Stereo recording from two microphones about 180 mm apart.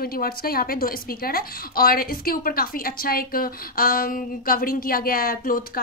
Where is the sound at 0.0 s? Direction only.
55° left (ahead or behind).